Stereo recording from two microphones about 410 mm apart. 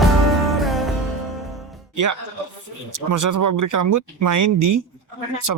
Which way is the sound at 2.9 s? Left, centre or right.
Right.